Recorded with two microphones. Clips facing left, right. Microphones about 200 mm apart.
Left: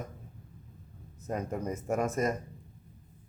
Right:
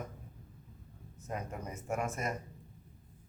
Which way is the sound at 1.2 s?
40° left (ahead or behind).